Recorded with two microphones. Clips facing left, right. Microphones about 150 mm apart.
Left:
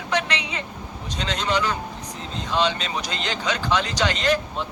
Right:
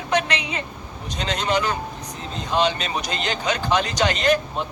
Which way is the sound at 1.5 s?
55° right (ahead or behind).